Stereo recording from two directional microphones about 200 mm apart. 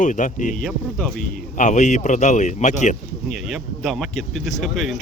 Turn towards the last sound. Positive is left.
turn(degrees=0)  # may be behind; listen again after turning